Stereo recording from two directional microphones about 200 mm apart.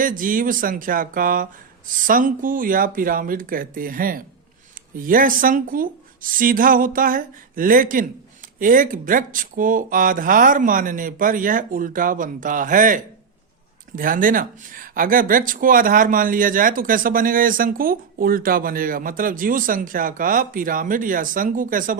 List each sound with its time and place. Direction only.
0.0 s speech: 45° right (ahead or behind)